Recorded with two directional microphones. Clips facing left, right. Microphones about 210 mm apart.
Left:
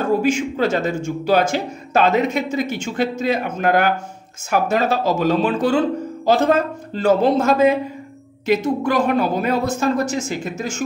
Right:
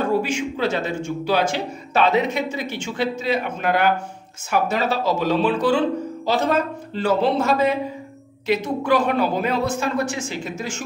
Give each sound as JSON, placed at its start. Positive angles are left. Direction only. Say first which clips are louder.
{"t": 0.2, "sound": "speech", "louder": "left 4 dB", "side_deg": 45}